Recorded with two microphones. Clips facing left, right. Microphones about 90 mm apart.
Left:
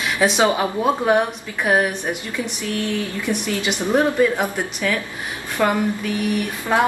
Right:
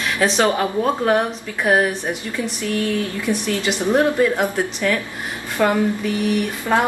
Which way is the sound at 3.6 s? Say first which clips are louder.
Right 1 dB; 5° left (ahead or behind).